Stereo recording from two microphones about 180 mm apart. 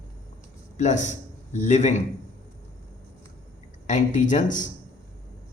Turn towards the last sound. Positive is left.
turn(degrees=45)  # may be behind; listen again after turning